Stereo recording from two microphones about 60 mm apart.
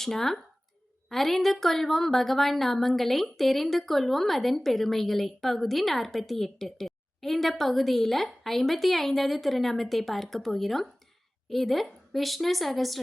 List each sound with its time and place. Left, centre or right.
0.0 s a woman's voice: centre